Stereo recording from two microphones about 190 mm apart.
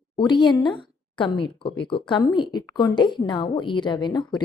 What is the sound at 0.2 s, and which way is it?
A woman's voice, 25° left (ahead or behind).